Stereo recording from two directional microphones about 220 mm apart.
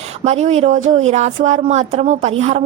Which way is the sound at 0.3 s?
30° right (ahead or behind).